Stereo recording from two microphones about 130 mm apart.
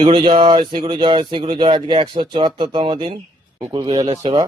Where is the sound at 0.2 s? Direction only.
40° right (ahead or behind).